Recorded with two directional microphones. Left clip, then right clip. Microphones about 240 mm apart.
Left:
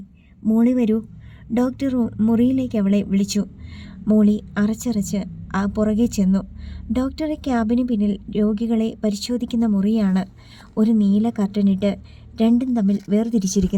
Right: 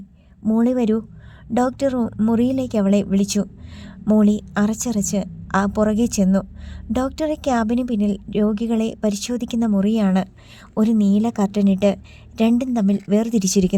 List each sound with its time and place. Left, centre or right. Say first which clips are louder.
0.4 s speech: even; right